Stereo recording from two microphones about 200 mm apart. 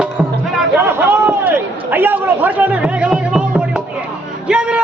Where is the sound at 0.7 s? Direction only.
10° right (ahead or behind).